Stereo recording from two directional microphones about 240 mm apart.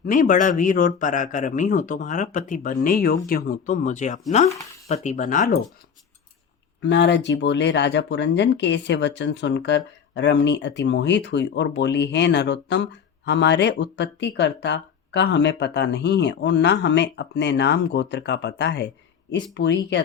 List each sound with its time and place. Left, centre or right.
0.0 s a man's voice: left
6.8 s speech: left